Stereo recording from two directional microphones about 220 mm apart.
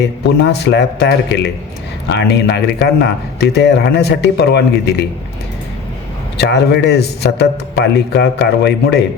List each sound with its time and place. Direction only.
0.3 s speech: 50° left (ahead or behind)
6.3 s speech: 50° left (ahead or behind)